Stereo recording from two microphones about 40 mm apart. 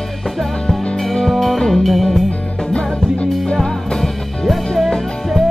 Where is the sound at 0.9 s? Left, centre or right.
Centre.